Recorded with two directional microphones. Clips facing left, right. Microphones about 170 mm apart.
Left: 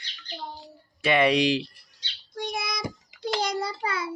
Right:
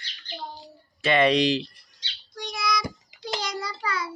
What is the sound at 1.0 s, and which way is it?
Speech, 10° left (ahead or behind).